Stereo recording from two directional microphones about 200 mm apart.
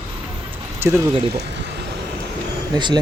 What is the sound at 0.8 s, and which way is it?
Speech, 10° right (ahead or behind).